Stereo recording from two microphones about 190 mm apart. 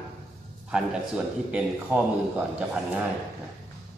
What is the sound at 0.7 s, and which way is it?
A man's voice, 5° right (ahead or behind).